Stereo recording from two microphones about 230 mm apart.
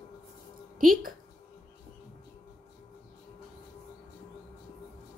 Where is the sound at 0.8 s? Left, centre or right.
Right.